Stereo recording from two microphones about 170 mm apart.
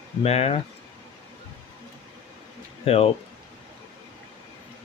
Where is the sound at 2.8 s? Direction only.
35° left (ahead or behind).